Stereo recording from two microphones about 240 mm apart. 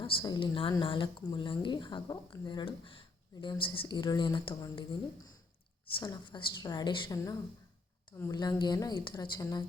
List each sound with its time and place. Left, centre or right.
0.0 s a woman's voice: centre